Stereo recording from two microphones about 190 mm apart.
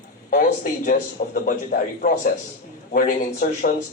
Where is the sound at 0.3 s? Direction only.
50° left (ahead or behind).